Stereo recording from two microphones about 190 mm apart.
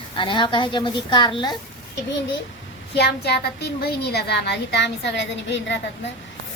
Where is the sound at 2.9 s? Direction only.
60° left (ahead or behind).